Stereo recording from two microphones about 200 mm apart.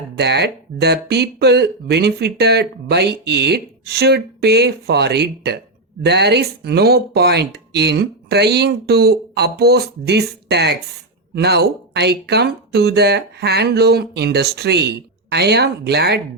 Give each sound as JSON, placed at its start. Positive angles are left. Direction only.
{"t": 0.2, "sound": "speech", "side_deg": -55}